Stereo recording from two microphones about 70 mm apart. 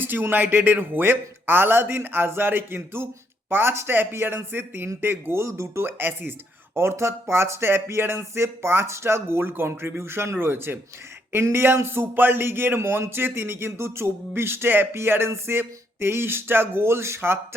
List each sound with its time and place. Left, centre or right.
0.0 s a man's voice: right